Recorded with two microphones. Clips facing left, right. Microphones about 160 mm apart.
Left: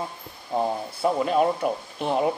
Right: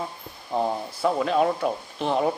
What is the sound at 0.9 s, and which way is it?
Speech, 20° left (ahead or behind).